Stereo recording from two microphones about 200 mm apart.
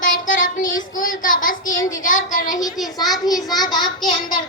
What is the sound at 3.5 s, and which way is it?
Speech, 20° left (ahead or behind).